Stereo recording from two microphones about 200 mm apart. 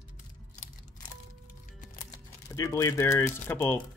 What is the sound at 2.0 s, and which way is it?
Typing, 15° left (ahead or behind).